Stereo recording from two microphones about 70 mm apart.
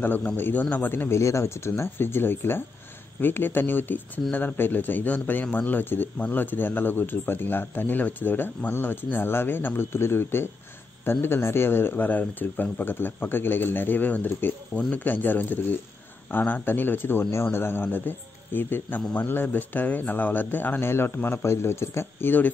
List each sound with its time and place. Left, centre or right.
0.0 s a man's voice: left